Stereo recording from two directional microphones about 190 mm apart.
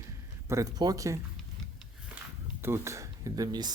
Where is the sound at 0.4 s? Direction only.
15° right (ahead or behind).